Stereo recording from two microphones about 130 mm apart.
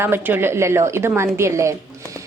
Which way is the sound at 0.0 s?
20° right (ahead or behind).